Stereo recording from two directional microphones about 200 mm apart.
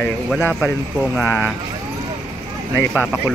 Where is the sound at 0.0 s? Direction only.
10° left (ahead or behind).